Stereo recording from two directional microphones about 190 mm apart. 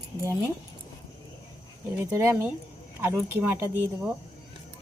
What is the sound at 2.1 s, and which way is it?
Speech, 10° right (ahead or behind).